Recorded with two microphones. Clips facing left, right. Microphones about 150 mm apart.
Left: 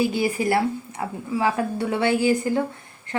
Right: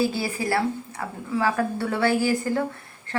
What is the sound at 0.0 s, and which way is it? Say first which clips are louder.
A woman's voice: left 3 dB; 15° left (ahead or behind).